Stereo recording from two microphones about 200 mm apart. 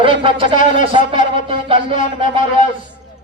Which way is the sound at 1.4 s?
25° right (ahead or behind).